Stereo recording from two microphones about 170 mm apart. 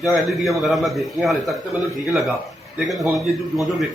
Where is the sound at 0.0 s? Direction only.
Centre (ahead or behind).